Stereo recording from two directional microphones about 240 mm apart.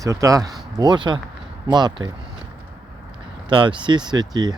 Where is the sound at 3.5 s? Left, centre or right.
Centre.